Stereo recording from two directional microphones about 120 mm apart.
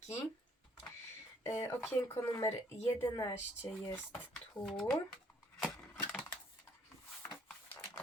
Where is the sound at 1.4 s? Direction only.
15° left (ahead or behind).